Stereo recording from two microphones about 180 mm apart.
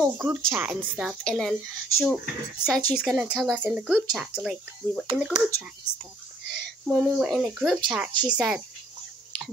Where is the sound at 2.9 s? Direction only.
5° right (ahead or behind).